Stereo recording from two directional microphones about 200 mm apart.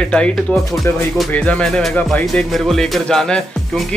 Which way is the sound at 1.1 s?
5° left (ahead or behind).